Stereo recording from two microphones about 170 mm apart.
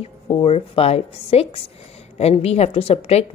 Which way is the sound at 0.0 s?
35° left (ahead or behind).